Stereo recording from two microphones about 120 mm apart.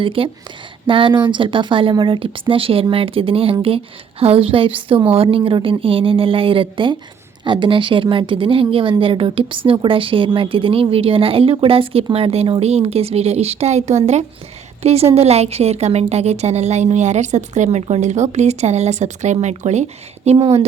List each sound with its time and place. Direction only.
0.0 s a woman's voice: 50° right (ahead or behind); by 19.8 s 75° right (ahead or behind)
20.2 s speech: 55° right (ahead or behind)